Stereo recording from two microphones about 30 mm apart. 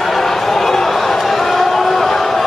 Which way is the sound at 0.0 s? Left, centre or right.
Centre.